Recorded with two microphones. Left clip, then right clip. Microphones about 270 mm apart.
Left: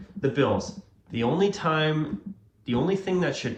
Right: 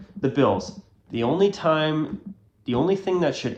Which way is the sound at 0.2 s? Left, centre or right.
Centre.